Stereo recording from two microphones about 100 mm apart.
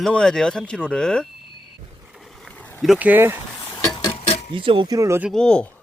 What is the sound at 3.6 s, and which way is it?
Dishes, 25° left (ahead or behind).